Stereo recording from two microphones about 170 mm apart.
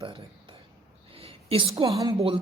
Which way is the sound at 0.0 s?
30° right (ahead or behind).